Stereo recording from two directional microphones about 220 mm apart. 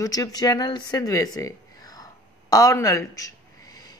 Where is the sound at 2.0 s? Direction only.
15° left (ahead or behind).